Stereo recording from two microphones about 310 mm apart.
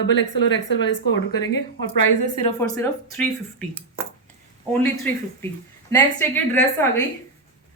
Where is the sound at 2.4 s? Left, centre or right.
Centre.